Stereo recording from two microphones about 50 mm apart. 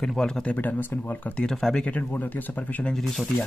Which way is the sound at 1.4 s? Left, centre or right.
Centre.